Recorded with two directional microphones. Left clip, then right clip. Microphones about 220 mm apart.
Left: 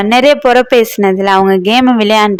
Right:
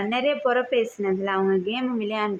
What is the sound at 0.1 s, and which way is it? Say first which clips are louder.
Speech: left 16 dB; 50° left (ahead or behind).